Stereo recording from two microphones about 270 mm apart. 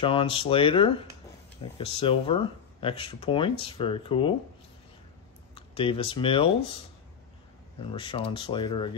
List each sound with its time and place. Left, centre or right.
0.0 s speech: centre
5.5 s speech: centre
7.8 s speech: centre